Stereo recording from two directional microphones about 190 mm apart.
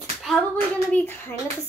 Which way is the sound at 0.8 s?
10° left (ahead or behind).